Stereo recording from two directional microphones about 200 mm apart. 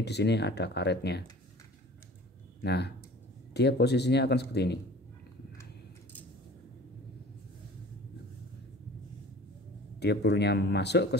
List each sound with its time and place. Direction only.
0.0 s speech: 55° left (ahead or behind)
2.6 s speech: 55° left (ahead or behind)
9.9 s speech: 55° left (ahead or behind)